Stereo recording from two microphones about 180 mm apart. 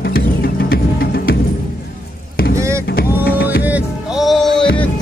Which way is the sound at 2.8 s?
60° left (ahead or behind).